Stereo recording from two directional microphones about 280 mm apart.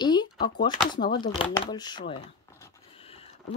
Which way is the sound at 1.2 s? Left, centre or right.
Centre.